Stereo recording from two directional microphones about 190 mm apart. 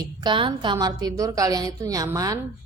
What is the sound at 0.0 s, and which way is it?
A woman's voice, 20° right (ahead or behind).